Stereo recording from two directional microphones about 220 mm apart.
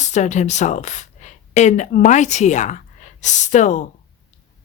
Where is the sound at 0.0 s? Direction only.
30° left (ahead or behind).